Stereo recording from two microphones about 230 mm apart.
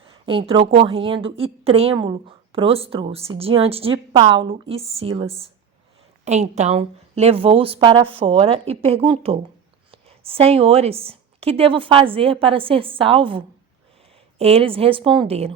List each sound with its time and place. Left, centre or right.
0.1 s a woman's voice: right